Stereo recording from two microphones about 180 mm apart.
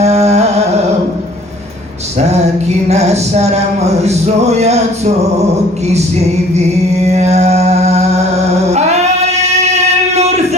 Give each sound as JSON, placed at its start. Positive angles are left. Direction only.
{"t": 0.0, "sound": "carnatic music", "side_deg": -35}
{"t": 2.1, "sound": "a sound", "side_deg": -35}
{"t": 7.0, "sound": "mantra", "side_deg": -40}
{"t": 8.7, "sound": "female singing", "side_deg": -35}
{"t": 10.2, "sound": "music", "side_deg": -40}